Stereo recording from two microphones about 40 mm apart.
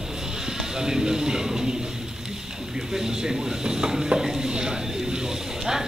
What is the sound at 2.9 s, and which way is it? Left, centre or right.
Dishes, centre.